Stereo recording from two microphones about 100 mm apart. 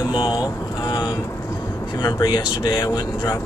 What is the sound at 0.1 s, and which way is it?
Vehicle, 45° left (ahead or behind).